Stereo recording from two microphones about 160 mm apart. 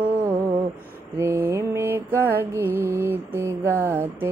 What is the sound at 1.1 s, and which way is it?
Mantra, 15° right (ahead or behind).